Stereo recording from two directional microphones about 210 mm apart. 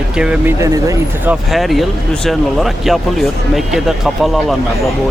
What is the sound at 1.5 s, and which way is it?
Speech, centre (ahead or behind).